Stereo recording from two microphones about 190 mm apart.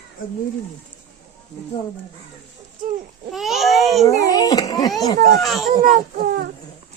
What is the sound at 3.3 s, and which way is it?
Babbling, centre (ahead or behind).